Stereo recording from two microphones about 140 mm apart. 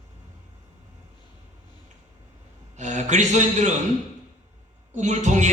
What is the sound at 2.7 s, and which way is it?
Speech, 60° right (ahead or behind).